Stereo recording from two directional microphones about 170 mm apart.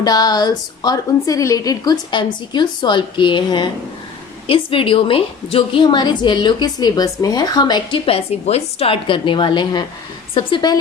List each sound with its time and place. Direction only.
0.0 s a woman's voice: 25° left (ahead or behind)